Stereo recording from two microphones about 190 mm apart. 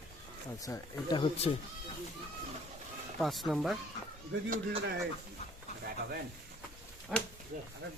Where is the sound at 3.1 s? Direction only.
Centre (ahead or behind).